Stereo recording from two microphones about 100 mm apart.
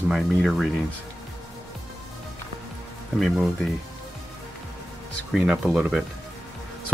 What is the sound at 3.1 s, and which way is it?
Speech, centre (ahead or behind).